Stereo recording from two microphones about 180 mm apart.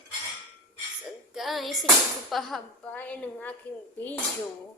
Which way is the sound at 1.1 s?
Centre (ahead or behind).